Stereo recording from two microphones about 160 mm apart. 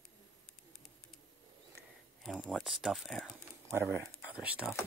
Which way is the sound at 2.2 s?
Centre (ahead or behind).